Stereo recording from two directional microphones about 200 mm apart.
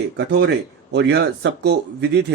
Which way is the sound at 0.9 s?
55° right (ahead or behind).